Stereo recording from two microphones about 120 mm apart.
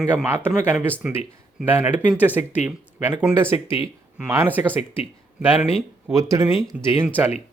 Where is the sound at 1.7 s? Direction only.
20° right (ahead or behind).